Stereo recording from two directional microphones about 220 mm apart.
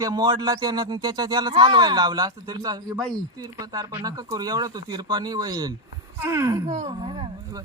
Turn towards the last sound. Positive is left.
turn(degrees=-25)  # may be behind; listen again after turning